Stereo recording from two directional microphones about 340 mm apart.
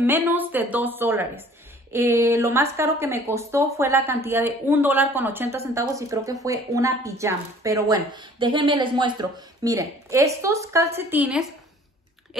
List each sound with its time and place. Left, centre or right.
0.0 s a woman's voice: centre